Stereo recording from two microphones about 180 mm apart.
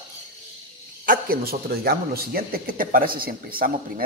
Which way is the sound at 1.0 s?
55° right (ahead or behind).